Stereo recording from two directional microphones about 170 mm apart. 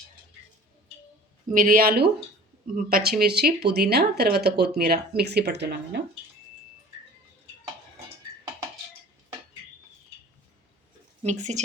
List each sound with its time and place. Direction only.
1.5 s speech: 55° right (ahead or behind); by 6.0 s 80° right
11.2 s speech: 45° right (ahead or behind)